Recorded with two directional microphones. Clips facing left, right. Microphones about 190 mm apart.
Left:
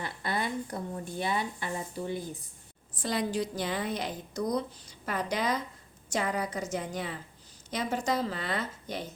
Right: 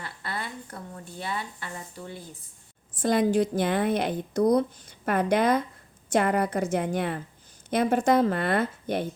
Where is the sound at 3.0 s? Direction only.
50° right (ahead or behind).